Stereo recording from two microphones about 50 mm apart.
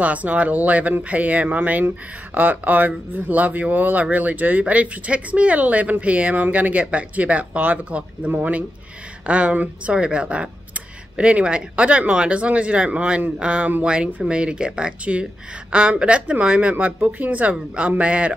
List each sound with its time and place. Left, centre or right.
0.0 s speech: right